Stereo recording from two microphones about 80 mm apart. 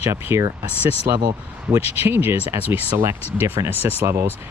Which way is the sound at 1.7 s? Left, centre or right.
Right.